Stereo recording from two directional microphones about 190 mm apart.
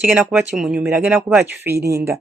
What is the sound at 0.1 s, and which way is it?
Speech, 5° right (ahead or behind).